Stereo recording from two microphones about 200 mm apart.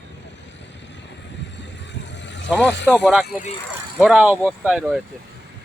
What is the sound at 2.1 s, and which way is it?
Vehicle, 65° left (ahead or behind).